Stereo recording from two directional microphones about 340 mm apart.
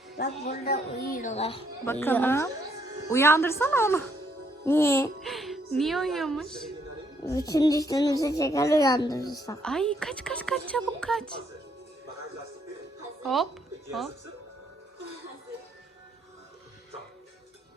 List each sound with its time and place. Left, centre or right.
0.2 s a woman's voice: left; by 11.3 s centre
13.2 s a woman's voice: centre